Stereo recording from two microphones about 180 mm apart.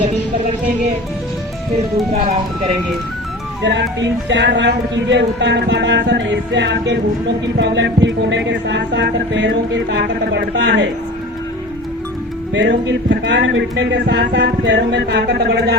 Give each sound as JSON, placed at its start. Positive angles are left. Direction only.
{"t": 3.6, "sound": "speech", "side_deg": -75}
{"t": 12.5, "sound": "speech", "side_deg": -80}